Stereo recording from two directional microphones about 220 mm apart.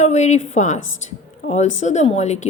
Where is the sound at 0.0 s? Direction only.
30° left (ahead or behind).